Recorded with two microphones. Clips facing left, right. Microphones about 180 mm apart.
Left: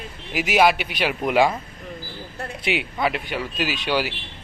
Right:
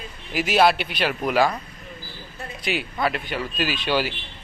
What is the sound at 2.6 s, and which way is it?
Speech, 20° left (ahead or behind).